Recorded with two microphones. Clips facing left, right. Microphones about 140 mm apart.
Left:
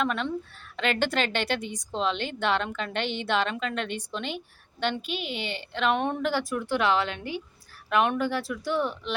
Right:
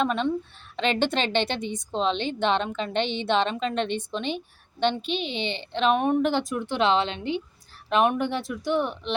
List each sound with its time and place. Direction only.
0.0 s a woman's voice: 20° right (ahead or behind)